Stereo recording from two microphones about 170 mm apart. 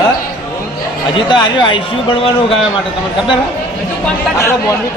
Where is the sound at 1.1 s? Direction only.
25° left (ahead or behind).